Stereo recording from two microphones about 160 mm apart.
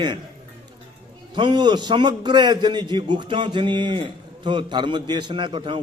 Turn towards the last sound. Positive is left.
turn(degrees=-30)  # may be behind; listen again after turning